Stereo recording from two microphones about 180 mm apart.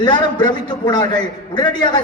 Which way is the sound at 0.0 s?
25° left (ahead or behind).